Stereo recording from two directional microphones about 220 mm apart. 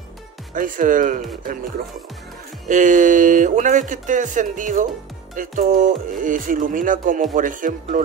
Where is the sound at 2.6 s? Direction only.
35° right (ahead or behind).